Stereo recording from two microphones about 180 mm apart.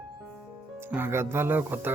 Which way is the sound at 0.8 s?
10° right (ahead or behind).